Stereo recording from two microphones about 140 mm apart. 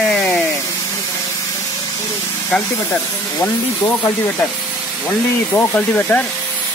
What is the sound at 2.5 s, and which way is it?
Speech, 10° left (ahead or behind).